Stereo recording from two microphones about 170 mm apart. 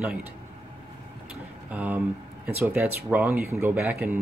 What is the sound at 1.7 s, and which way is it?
Speech, 10° right (ahead or behind).